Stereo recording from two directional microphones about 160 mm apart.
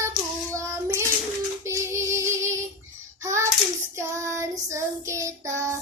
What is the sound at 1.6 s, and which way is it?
Female singing, 20° right (ahead or behind).